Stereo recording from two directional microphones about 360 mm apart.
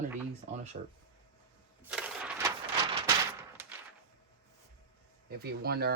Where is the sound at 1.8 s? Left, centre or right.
Centre.